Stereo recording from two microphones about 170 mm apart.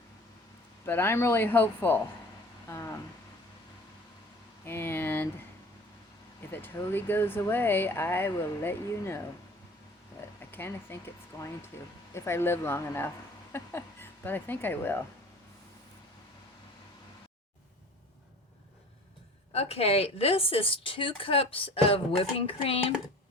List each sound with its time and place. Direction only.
0.9 s speech: 10° left (ahead or behind)
2.6 s a sound: 20° left (ahead or behind)
4.6 s speech: 15° left (ahead or behind)
6.4 s speech: 10° left (ahead or behind)
10.4 s speech: 15° left (ahead or behind)
19.5 s a woman's voice: 35° left (ahead or behind)